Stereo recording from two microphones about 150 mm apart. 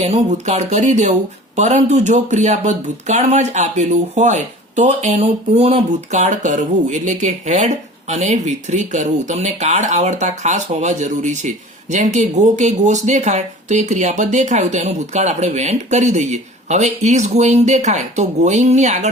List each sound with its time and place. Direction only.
0.0 s speech: 50° right (ahead or behind)